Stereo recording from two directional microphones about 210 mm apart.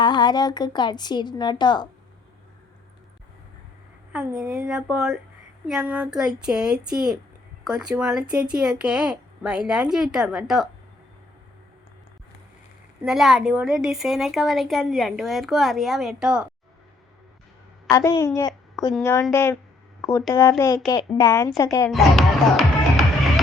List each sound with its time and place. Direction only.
0.0 s speech: 20° left (ahead or behind)
4.4 s a woman's voice: 5° right (ahead or behind)
13.0 s a woman's voice: centre (ahead or behind)
17.9 s a woman's voice: 15° left (ahead or behind)
21.8 s music: centre (ahead or behind)